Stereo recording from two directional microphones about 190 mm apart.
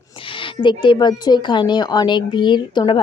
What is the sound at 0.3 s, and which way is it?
A woman's voice, 25° left (ahead or behind).